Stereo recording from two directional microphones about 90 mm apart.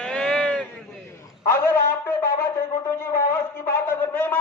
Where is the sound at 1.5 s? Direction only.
30° left (ahead or behind).